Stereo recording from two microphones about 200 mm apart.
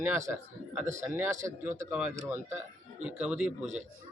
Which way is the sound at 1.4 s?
10° right (ahead or behind).